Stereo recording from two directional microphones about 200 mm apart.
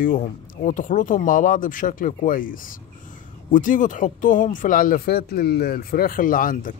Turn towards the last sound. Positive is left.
turn(degrees=45)  # may be behind; listen again after turning